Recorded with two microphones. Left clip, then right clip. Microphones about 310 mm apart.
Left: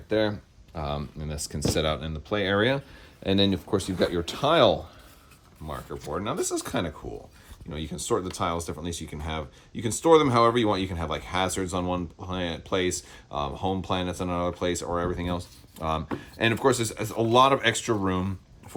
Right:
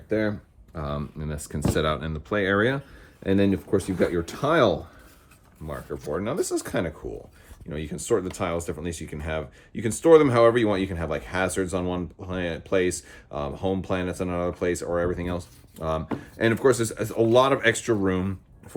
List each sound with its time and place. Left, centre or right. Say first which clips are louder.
0.1 s speech: left 1 dB; centre
6.1 s speech: right 2 dB; centre